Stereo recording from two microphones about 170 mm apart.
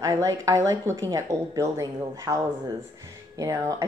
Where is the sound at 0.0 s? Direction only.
20° right (ahead or behind).